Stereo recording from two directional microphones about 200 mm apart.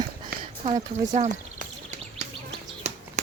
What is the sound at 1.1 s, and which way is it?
Speech, 35° right (ahead or behind).